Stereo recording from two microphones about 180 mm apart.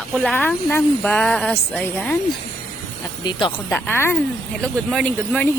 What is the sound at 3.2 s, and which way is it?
Speech, 20° left (ahead or behind).